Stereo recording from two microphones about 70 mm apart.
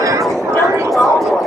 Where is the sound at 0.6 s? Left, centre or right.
Right.